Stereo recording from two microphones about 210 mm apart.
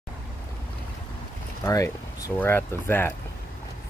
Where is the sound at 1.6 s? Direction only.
15° left (ahead or behind).